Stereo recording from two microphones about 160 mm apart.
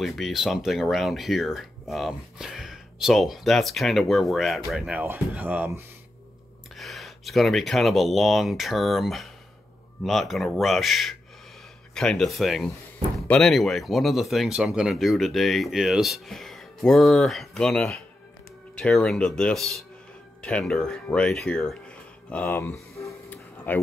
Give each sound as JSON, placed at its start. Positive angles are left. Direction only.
{"t": 0.0, "sound": "speech", "side_deg": 0}
{"t": 6.8, "sound": "speech", "side_deg": 0}
{"t": 20.4, "sound": "music", "side_deg": 5}